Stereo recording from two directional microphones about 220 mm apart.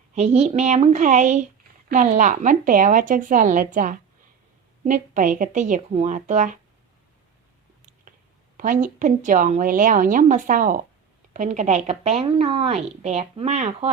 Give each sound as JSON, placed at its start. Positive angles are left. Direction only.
{"t": 0.1, "sound": "a woman's voice", "side_deg": -30}
{"t": 8.5, "sound": "a woman's voice", "side_deg": -35}